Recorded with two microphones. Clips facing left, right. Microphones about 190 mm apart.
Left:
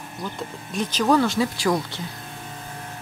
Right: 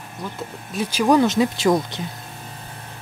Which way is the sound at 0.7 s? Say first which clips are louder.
Right 3 dB; 10° right (ahead or behind).